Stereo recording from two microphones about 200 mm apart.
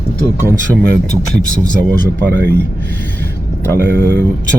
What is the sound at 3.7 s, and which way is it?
Speech, 55° right (ahead or behind).